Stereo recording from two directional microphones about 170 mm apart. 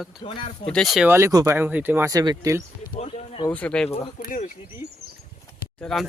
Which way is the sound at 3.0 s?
35° left (ahead or behind).